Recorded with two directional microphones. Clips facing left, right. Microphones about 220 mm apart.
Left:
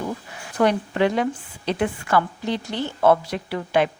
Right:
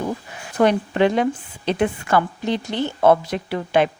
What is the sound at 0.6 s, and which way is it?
A woman's voice, 25° right (ahead or behind).